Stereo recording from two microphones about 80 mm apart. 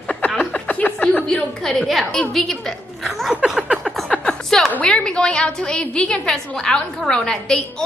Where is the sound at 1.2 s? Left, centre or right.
Centre.